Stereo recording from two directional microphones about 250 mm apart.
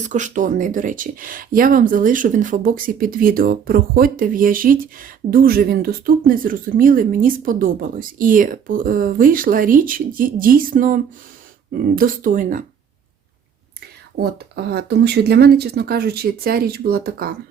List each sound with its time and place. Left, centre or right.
0.0 s speech: right
14.2 s speech: right